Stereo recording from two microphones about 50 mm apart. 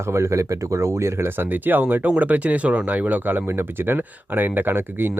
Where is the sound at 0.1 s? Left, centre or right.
Right.